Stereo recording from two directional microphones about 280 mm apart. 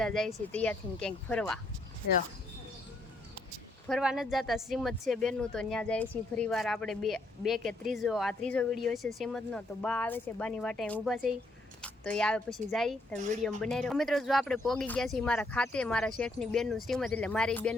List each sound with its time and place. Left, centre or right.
0.0 s speech: centre
3.8 s speech: centre
13.1 s speech: right
13.6 s speech: centre